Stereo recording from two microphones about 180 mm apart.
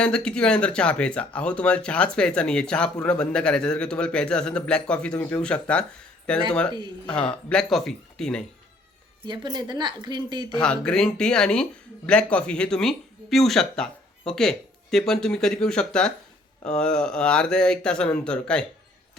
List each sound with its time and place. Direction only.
0.0 s speech: 5° left (ahead or behind)
9.2 s a woman's voice: 25° right (ahead or behind)
10.6 s speech: 5° left (ahead or behind)